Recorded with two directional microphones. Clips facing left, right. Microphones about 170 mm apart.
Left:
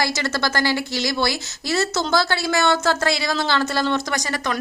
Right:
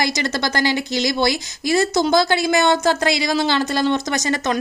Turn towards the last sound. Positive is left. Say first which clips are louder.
# right 4 dB
turn(degrees=-20)  # may be behind; listen again after turning